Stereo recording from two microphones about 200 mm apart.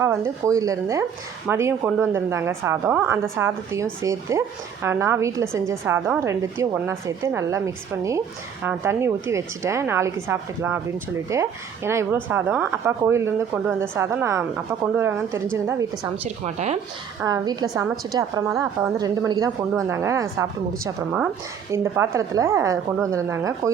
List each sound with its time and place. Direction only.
0.0 s speech: 10° right (ahead or behind)
17.2 s speech: 20° right (ahead or behind)